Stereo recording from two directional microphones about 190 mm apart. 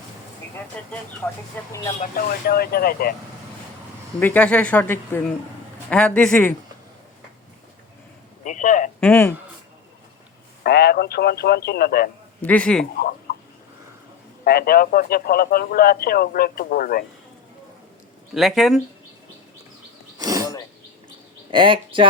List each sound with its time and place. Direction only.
0.8 s speech: 5° left (ahead or behind)
2.0 s speech: 50° left (ahead or behind)
4.2 s a man's voice: 10° left (ahead or behind)
8.4 s a man's voice: 40° left (ahead or behind)
9.0 s speech: 10° left (ahead or behind)
10.6 s speech: 55° left (ahead or behind)
12.4 s speech: 5° left (ahead or behind)
14.4 s speech: 55° left (ahead or behind)
18.3 s a man's voice: centre (ahead or behind)
20.1 s throat clearing: 20° right (ahead or behind)
21.5 s speech: 25° right (ahead or behind)